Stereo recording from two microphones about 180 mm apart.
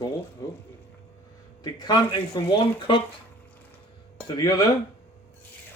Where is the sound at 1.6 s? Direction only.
25° left (ahead or behind).